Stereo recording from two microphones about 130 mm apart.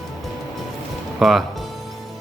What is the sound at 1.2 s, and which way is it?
Speech, centre (ahead or behind).